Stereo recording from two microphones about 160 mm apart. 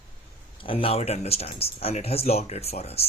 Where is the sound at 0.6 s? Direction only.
35° left (ahead or behind).